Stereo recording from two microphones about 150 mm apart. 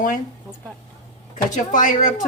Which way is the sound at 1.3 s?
60° left (ahead or behind).